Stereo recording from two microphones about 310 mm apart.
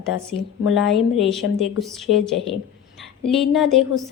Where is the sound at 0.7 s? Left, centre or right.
Centre.